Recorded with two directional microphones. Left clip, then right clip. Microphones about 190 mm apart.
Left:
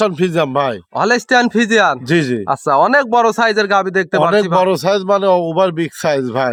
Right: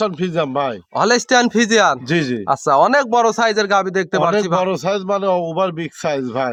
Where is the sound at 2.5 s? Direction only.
20° left (ahead or behind).